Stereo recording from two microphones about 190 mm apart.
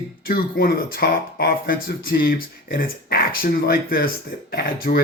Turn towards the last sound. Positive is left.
turn(degrees=50)  # may be behind; listen again after turning